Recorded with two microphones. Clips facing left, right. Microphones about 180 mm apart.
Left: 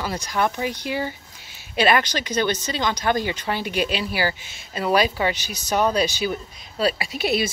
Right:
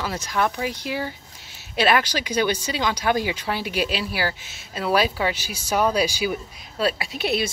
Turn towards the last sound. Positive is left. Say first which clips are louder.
# left 1 dB
turn(degrees=0)  # may be behind; listen again after turning